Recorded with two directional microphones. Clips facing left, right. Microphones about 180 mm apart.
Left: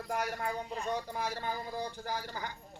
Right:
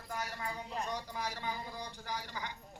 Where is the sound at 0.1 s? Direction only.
60° left (ahead or behind).